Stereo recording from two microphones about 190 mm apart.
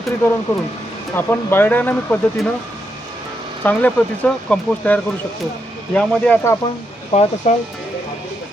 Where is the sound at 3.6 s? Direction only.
10° left (ahead or behind).